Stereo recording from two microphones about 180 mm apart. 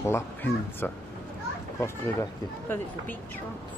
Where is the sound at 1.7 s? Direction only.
15° left (ahead or behind).